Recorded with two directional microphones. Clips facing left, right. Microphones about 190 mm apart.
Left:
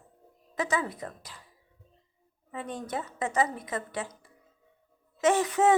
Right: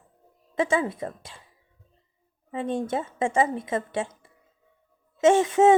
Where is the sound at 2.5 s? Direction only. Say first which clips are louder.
Right 8 dB; 25° right (ahead or behind).